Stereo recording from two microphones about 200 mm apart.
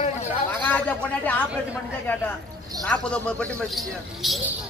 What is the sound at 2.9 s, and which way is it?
Speech, 5° left (ahead or behind).